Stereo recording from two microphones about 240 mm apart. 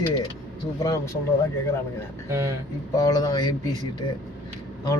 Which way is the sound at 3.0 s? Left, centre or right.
Centre.